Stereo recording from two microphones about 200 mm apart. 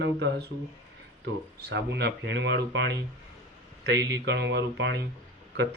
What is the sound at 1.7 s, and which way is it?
Speech, 60° right (ahead or behind).